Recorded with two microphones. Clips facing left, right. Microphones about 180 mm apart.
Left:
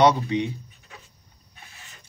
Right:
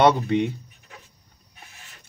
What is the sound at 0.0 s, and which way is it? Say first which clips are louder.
Speech: right 1 dB; 55° right (ahead or behind).